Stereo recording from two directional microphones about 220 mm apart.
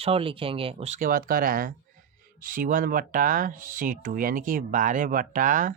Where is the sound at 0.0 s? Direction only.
25° right (ahead or behind).